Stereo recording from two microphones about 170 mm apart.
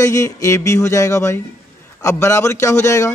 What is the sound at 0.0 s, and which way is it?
A man's voice, 20° left (ahead or behind).